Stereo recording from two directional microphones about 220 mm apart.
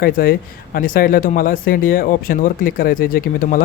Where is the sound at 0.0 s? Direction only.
40° left (ahead or behind).